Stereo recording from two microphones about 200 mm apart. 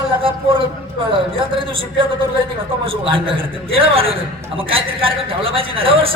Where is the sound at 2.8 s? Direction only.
25° right (ahead or behind).